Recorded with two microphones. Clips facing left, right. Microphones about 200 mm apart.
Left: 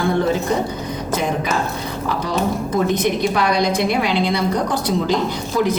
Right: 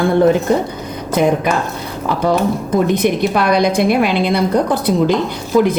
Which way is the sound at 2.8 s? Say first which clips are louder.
Right 3 dB; 60° right (ahead or behind).